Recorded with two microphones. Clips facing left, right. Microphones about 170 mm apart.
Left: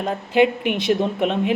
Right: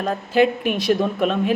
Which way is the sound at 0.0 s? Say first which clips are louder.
Even; 20° left (ahead or behind).